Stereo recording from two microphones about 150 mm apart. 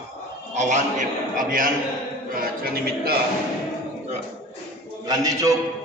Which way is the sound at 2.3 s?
85° right.